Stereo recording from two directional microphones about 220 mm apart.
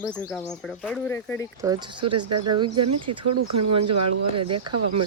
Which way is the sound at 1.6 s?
20° right (ahead or behind).